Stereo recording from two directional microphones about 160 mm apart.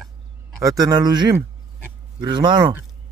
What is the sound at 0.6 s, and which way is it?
A man's voice, 25° right (ahead or behind).